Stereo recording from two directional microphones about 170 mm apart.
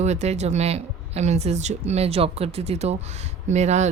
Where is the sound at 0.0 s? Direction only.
40° right (ahead or behind).